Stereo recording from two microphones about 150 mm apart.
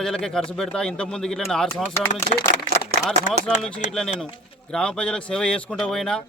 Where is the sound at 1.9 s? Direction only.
15° left (ahead or behind).